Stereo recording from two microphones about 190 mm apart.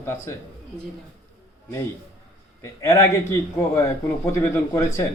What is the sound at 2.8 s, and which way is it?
Speech, 15° left (ahead or behind).